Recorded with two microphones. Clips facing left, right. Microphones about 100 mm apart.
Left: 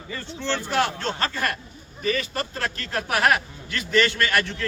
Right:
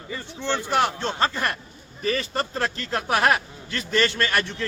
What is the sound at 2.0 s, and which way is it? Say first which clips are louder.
Speech: even; 35° right (ahead or behind).